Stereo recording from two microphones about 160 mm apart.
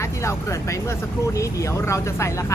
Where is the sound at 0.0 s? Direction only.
20° left (ahead or behind).